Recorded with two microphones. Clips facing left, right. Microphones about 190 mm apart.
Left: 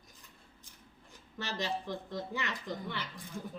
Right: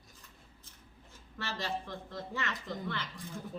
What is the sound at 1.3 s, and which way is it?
Speech, 20° left (ahead or behind).